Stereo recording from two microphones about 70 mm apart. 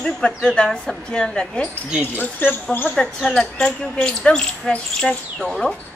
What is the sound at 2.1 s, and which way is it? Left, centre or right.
Speech, left.